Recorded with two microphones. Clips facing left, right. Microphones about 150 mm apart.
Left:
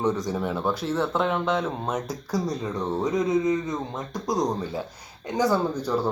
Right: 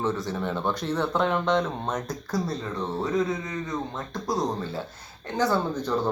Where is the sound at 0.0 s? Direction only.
15° left (ahead or behind).